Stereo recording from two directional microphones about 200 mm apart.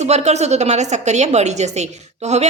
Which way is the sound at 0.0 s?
35° right (ahead or behind).